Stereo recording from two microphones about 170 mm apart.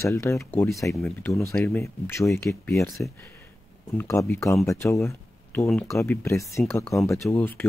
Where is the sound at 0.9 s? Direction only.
Centre (ahead or behind).